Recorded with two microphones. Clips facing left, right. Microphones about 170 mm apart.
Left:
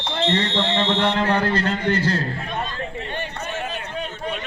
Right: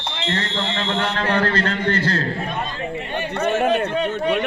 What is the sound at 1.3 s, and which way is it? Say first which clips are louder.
Speech: right 1 dB; 10° left (ahead or behind).